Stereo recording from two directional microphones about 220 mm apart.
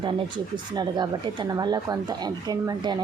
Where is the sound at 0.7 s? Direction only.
20° right (ahead or behind).